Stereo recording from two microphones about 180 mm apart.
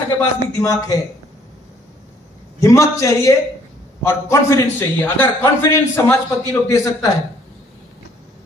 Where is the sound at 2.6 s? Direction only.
15° left (ahead or behind).